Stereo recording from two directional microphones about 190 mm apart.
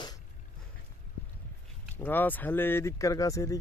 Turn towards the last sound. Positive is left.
turn(degrees=15)  # may be behind; listen again after turning